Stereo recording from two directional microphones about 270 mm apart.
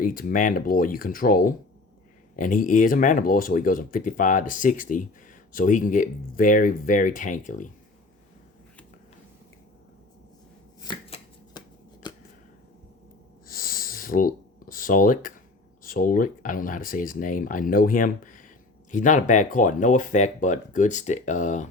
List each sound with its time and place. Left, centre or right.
0.0 s speech: left
10.8 s chopping: centre
13.5 s a sound: left
15.8 s speech: left